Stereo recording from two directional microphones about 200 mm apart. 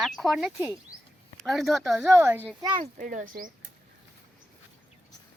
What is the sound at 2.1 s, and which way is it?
Speech, 10° right (ahead or behind).